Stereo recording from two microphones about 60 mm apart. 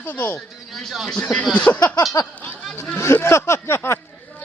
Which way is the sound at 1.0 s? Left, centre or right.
Centre.